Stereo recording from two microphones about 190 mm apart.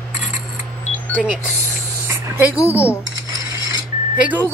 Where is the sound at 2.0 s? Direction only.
15° right (ahead or behind).